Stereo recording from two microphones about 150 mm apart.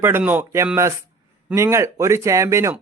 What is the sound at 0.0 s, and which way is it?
A man's voice, 15° right (ahead or behind).